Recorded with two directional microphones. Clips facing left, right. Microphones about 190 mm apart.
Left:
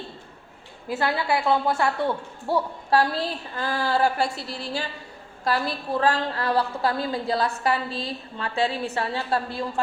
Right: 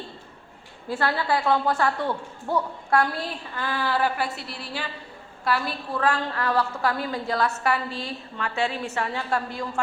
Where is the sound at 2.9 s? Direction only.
35° left (ahead or behind).